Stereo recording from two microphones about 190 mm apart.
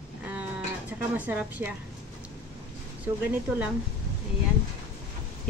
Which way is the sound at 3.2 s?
10° right (ahead or behind).